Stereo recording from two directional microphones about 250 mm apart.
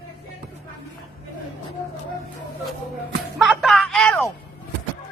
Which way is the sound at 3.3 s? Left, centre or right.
Centre.